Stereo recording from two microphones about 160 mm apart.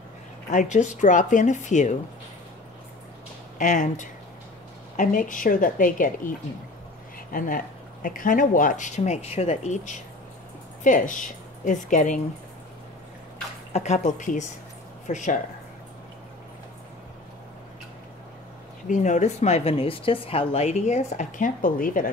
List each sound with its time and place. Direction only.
0.5 s speech: 50° left (ahead or behind)
3.5 s a woman's voice: 50° left (ahead or behind)
7.3 s a woman's voice: 60° left (ahead or behind)
13.7 s speech: 45° left (ahead or behind)
18.9 s speech: 50° left (ahead or behind)